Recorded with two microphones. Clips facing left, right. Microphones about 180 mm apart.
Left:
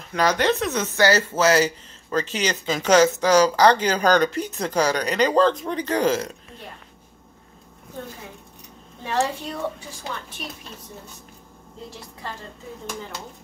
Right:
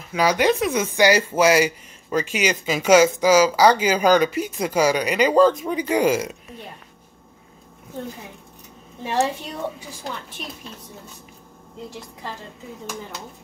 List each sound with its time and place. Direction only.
0.1 s speech: 10° right (ahead or behind)
9.0 s a woman's voice: 20° right (ahead or behind)